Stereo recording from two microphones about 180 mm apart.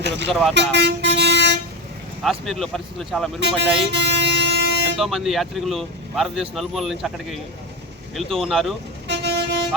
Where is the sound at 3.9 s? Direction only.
75° right (ahead or behind).